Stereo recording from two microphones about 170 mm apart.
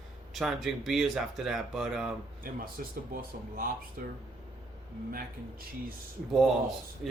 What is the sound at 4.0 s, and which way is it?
Speech, 55° right (ahead or behind).